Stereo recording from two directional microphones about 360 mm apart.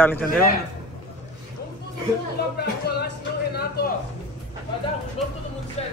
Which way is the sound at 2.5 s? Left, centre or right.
Left.